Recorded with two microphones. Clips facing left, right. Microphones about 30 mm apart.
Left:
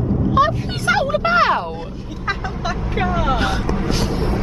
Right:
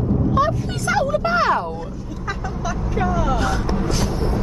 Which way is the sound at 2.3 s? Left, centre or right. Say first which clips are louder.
Left 3 dB; left.